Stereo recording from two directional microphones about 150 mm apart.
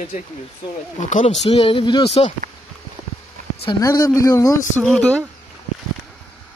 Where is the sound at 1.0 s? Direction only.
55° left (ahead or behind).